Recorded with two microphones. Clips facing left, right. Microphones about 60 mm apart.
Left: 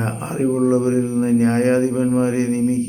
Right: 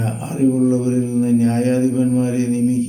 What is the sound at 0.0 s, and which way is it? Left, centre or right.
Speech, left.